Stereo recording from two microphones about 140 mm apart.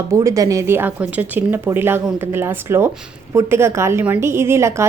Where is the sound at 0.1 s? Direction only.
20° right (ahead or behind).